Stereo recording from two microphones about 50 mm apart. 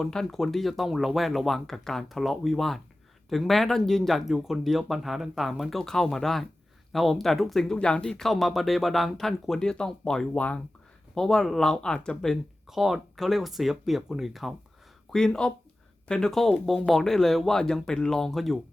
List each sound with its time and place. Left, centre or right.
0.0 s speech: centre
5.8 s speech: centre
8.2 s speech: centre
10.3 s speech: left
11.1 s speech: centre
12.6 s speech: centre
15.1 s speech: centre
16.3 s speech: centre